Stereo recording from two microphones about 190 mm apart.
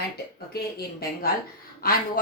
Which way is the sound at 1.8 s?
50° left (ahead or behind).